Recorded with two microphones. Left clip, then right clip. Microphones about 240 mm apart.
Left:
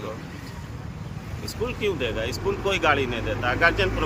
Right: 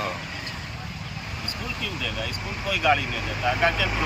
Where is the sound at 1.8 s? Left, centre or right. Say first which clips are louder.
Left 5 dB; centre.